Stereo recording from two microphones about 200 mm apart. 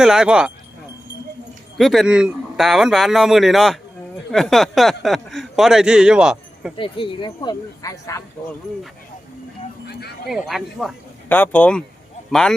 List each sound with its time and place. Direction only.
0.0 s a man's voice: 5° right (ahead or behind)
1.8 s a man's voice: centre (ahead or behind)
6.7 s speech: 25° left (ahead or behind)
9.8 s music: 55° left (ahead or behind)
10.2 s a man's voice: centre (ahead or behind)
11.3 s a man's voice: 10° left (ahead or behind)